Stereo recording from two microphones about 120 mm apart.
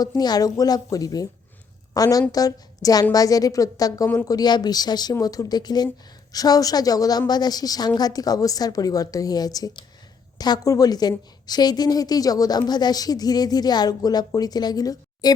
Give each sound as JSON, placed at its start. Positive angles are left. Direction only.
{"t": 0.2, "sound": "a woman's voice", "side_deg": 35}